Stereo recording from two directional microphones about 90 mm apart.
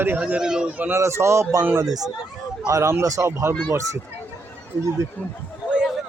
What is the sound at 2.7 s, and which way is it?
Speech, 30° right (ahead or behind).